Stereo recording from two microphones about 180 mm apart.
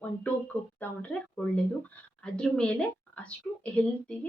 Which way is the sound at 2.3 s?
5° left (ahead or behind).